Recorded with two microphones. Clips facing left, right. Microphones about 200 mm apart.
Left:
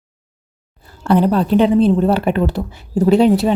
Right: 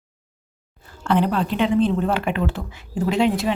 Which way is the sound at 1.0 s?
40° left (ahead or behind).